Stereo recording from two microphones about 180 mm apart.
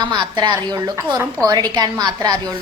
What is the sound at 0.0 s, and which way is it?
A woman's voice, 25° right (ahead or behind).